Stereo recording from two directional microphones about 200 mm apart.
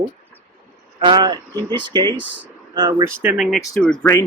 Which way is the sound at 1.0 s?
20° right (ahead or behind).